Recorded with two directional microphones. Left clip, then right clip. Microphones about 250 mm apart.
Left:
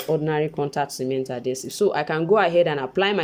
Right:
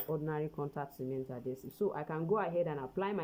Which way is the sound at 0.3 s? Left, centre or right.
Centre.